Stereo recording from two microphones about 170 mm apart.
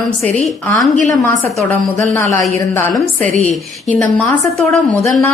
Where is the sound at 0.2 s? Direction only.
40° right (ahead or behind).